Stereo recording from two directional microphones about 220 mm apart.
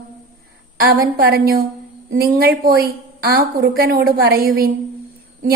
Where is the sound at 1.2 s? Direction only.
45° right (ahead or behind).